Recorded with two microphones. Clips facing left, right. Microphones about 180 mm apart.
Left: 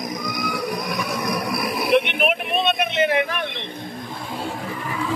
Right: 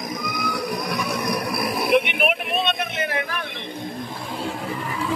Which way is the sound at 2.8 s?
20° left (ahead or behind).